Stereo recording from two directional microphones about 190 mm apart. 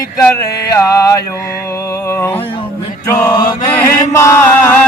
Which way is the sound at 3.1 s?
15° left (ahead or behind).